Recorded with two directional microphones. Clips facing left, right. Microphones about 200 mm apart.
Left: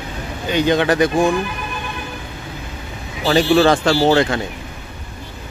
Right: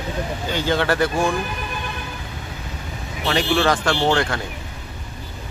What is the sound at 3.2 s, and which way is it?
Speech, 30° left (ahead or behind).